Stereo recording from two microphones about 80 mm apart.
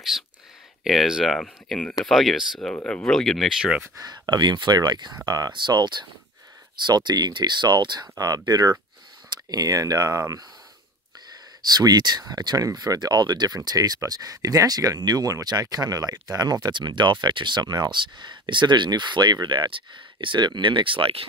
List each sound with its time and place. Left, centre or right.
0.8 s speech: centre
2.7 s speech: centre
4.0 s speech: right
5.5 s speech: right
8.2 s speech: right
11.7 s speech: right
13.7 s speech: right